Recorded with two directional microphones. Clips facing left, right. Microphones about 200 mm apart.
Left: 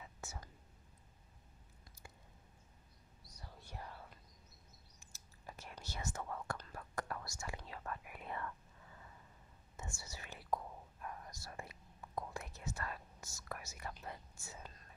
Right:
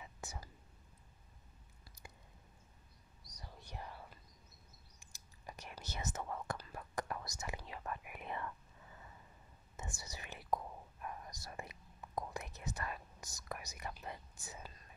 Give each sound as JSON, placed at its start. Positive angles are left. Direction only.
{"t": 0.2, "sound": "whispering", "side_deg": -15}
{"t": 3.3, "sound": "whispering", "side_deg": -15}
{"t": 5.0, "sound": "whispering", "side_deg": -15}
{"t": 9.8, "sound": "whispering", "side_deg": -20}